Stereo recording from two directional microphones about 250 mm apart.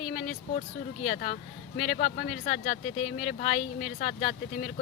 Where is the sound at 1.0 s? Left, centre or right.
Left.